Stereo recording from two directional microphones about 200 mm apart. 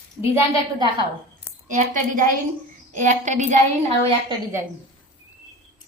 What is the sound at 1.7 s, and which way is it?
A woman's voice, 40° right (ahead or behind).